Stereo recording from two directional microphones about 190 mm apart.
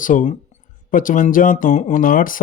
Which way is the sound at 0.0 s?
45° left (ahead or behind).